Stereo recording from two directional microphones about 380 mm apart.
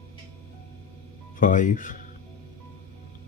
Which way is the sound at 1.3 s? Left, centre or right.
Left.